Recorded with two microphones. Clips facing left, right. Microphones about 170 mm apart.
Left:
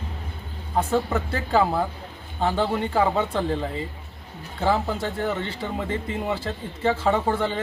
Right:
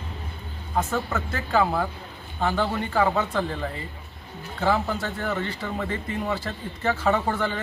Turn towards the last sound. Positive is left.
turn(degrees=30)  # may be behind; listen again after turning